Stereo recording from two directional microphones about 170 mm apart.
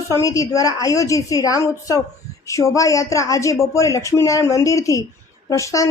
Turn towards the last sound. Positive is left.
turn(degrees=20)  # may be behind; listen again after turning